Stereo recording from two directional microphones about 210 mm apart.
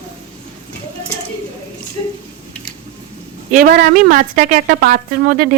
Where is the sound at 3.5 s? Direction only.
45° right (ahead or behind).